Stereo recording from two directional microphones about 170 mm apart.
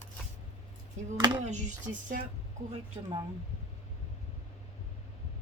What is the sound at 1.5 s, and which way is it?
Speech, 45° right (ahead or behind).